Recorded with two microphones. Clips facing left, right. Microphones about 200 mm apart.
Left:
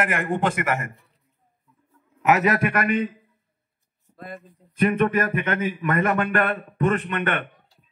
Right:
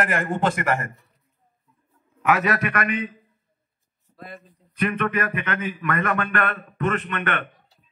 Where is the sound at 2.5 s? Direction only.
25° left (ahead or behind).